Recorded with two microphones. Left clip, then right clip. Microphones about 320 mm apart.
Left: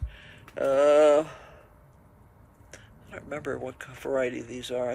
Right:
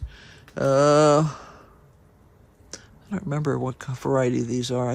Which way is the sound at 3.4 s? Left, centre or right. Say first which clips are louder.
Right 8 dB; centre.